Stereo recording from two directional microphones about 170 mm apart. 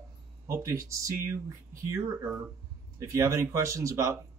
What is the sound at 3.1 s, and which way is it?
Speech, 15° right (ahead or behind).